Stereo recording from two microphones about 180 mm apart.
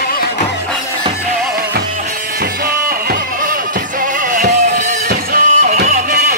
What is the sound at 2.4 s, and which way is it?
Music, 60° right (ahead or behind).